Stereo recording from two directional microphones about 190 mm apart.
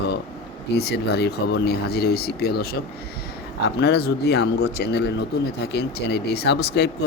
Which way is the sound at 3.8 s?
60° left (ahead or behind).